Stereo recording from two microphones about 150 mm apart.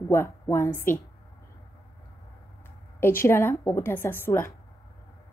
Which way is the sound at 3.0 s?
15° left (ahead or behind).